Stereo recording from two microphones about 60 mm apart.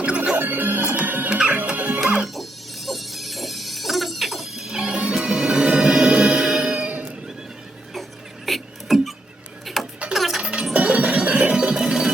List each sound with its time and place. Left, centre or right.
0.0 s music: centre
0.3 s music: right
1.3 s music: centre
2.0 s music: centre
8.4 s rodents: centre
9.8 s a sound: centre
10.2 s music: centre
10.4 s music: centre